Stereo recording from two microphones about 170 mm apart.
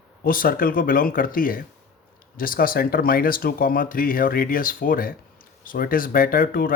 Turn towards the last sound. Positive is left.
turn(degrees=55)  # may be behind; listen again after turning